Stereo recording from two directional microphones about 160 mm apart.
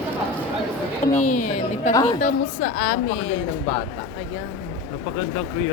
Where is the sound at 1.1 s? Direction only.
50° left (ahead or behind).